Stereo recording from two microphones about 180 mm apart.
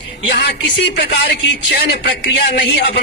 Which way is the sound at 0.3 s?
65° left (ahead or behind).